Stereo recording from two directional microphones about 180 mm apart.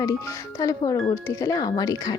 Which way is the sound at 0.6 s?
20° left (ahead or behind).